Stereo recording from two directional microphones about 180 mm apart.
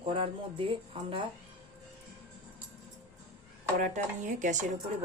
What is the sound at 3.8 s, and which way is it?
Speech, 45° right (ahead or behind).